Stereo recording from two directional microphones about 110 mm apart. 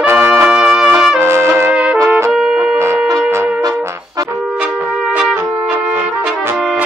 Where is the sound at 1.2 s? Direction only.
25° right (ahead or behind).